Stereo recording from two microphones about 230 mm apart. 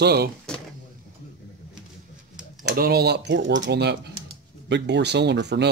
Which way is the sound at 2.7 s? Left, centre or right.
Right.